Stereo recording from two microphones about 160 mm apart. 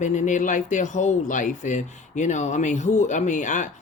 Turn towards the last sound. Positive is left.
turn(degrees=50)  # may be behind; listen again after turning